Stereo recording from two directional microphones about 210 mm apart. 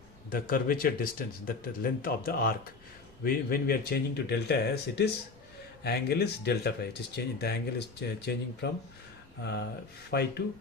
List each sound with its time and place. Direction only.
0.3 s speech: 40° left (ahead or behind)